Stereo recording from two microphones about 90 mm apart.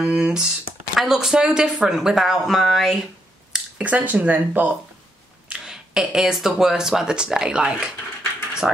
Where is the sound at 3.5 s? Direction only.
15° right (ahead or behind).